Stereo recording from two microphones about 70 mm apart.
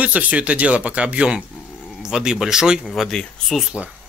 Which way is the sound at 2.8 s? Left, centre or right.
Centre.